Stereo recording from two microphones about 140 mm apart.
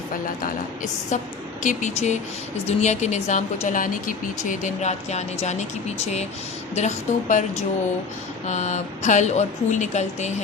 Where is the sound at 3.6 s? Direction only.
75° left (ahead or behind); by 7.5 s 55° left (ahead or behind).